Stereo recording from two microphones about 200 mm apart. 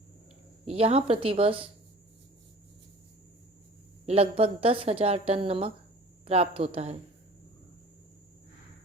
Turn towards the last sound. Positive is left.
turn(degrees=-30)  # may be behind; listen again after turning